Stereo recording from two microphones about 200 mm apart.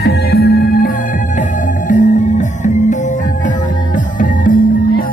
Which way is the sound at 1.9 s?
40° left (ahead or behind).